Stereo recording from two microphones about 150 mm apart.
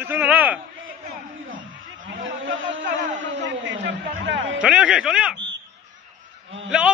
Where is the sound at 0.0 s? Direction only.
10° right (ahead or behind).